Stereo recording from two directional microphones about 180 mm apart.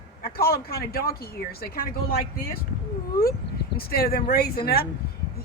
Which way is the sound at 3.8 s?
55° left (ahead or behind).